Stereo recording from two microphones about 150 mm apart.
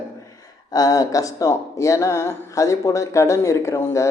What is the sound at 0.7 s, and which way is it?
Speech, 25° left (ahead or behind).